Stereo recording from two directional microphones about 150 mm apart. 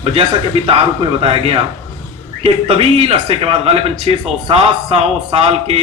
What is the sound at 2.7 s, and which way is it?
Speech, 40° right (ahead or behind).